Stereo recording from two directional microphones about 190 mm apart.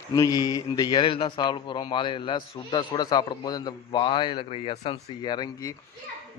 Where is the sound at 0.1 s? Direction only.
20° left (ahead or behind).